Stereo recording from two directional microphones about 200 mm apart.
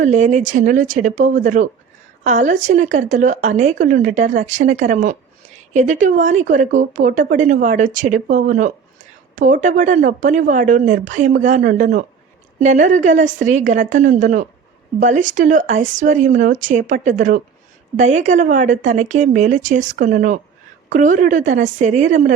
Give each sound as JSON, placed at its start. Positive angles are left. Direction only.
{"t": 0.0, "sound": "speech", "side_deg": -35}